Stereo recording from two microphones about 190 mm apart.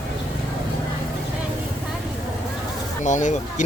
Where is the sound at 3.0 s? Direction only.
40° left (ahead or behind).